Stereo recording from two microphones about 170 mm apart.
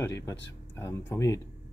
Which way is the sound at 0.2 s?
15° left (ahead or behind).